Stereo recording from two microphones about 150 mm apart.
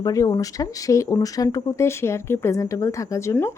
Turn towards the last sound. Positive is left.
turn(degrees=15)  # may be behind; listen again after turning